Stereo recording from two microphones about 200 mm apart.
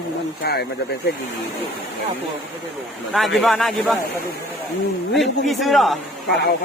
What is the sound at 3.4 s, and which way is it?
Speech, centre (ahead or behind).